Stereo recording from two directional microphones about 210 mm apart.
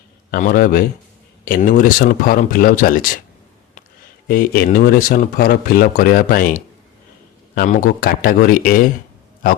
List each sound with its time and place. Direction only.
0.3 s speech: 45° left (ahead or behind)
4.3 s speech: 45° left (ahead or behind)